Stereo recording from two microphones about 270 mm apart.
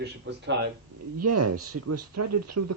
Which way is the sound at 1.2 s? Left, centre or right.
Right.